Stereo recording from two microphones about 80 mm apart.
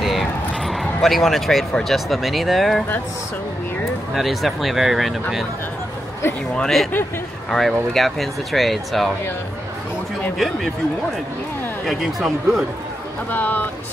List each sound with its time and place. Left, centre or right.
0.0 s speech: centre
4.1 s speech: centre
6.5 s speech: centre
10.3 s speech: centre
11.8 s speech: centre
13.3 s speech: left